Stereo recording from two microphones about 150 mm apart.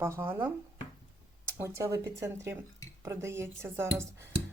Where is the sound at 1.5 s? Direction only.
15° right (ahead or behind).